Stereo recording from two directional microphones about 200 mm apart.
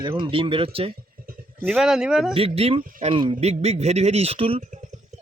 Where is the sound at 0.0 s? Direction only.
25° right (ahead or behind).